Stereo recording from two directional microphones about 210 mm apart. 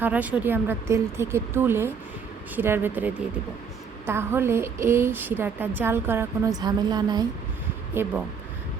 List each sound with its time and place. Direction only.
0.0 s a woman's voice: 5° right (ahead or behind)